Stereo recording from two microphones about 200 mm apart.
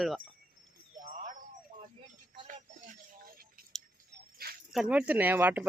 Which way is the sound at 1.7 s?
45° right (ahead or behind).